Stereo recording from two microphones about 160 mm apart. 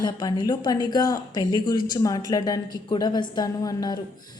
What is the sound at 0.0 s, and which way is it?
A woman's voice, 25° left (ahead or behind).